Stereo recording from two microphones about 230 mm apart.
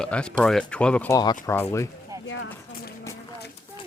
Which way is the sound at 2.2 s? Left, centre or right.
Left.